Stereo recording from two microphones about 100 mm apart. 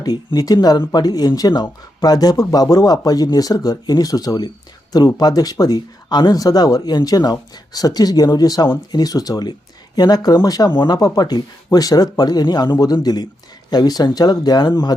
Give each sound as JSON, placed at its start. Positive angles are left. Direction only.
{"t": 0.0, "sound": "speech", "side_deg": 40}